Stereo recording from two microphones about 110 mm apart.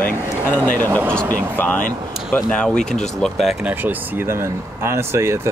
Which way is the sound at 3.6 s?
15° right (ahead or behind).